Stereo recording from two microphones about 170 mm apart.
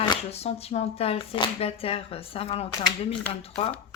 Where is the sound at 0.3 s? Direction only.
40° left (ahead or behind).